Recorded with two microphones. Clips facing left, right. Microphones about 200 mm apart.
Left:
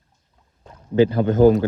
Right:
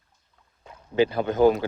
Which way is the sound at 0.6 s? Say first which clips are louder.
Left 5 dB; 15° right (ahead or behind).